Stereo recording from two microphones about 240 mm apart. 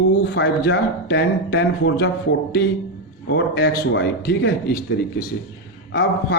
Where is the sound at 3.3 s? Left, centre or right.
Left.